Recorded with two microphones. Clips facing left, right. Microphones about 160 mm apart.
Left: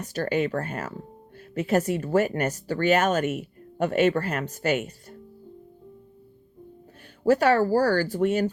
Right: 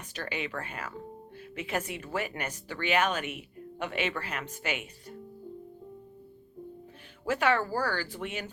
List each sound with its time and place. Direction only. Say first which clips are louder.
0.0 s speech: left 11 dB; 40° left (ahead or behind)
7.3 s speech: left 8 dB; 40° left (ahead or behind)